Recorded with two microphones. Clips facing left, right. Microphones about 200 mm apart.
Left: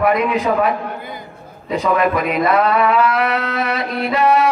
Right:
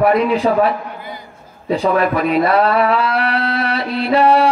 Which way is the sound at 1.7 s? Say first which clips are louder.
Right 1 dB; 30° right (ahead or behind).